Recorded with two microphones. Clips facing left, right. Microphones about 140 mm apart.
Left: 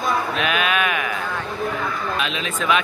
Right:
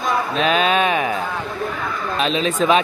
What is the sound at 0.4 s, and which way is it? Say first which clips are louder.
Speech: right 4 dB; 30° right (ahead or behind).